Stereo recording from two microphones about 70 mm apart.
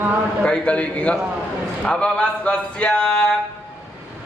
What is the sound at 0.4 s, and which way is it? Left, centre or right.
Speech, centre.